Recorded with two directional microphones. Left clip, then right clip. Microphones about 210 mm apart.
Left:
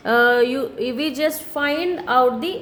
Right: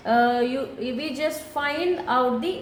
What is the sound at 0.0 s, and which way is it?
A woman's voice, 50° left (ahead or behind).